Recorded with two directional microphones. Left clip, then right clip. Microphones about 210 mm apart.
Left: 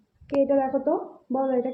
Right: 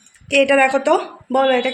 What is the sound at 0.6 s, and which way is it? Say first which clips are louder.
Speech: right 9 dB; 90° right.